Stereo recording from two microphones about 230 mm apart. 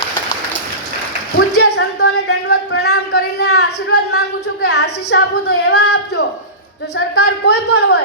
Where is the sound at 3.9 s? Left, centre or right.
Left.